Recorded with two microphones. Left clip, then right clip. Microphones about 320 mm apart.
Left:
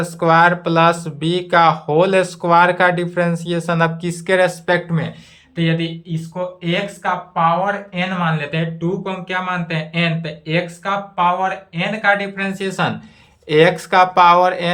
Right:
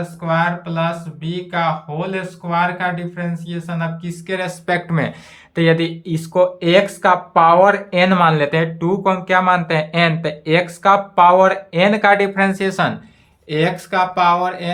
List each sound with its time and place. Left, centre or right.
0.0 s speech: centre
5.5 s speech: centre
13.5 s speech: centre